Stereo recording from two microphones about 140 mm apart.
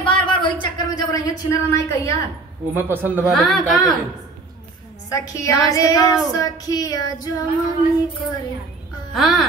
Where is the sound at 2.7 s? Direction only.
15° right (ahead or behind).